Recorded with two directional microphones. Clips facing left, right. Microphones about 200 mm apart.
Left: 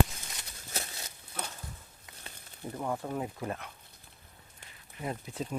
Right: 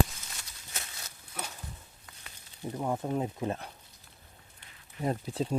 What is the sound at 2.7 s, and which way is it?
Speech, 15° right (ahead or behind).